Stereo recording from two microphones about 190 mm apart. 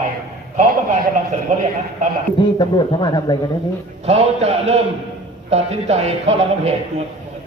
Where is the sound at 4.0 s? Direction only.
35° right (ahead or behind).